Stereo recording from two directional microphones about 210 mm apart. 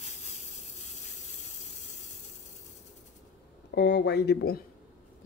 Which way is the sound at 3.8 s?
55° left (ahead or behind).